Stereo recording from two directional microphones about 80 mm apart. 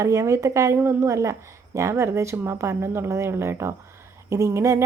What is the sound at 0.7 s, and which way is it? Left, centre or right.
A woman's voice, right.